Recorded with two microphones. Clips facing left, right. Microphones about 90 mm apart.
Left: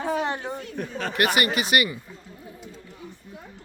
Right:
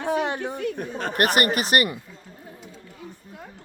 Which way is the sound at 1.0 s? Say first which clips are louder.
Right 1 dB; 45° right (ahead or behind).